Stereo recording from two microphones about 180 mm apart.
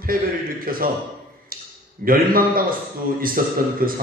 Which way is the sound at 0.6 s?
50° right (ahead or behind).